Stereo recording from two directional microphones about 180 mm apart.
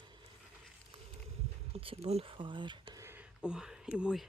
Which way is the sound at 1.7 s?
30° right (ahead or behind).